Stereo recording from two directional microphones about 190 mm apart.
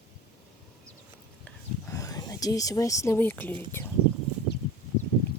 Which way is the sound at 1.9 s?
20° left (ahead or behind).